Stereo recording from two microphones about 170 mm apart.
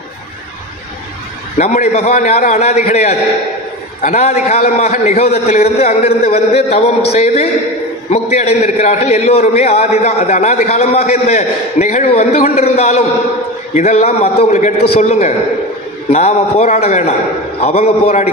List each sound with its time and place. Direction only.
1.6 s a man's voice: 45° left (ahead or behind)